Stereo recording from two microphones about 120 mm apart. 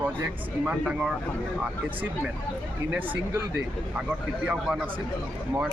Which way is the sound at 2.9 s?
15° right (ahead or behind).